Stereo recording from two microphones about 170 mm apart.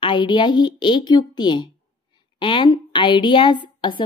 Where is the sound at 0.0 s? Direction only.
25° left (ahead or behind).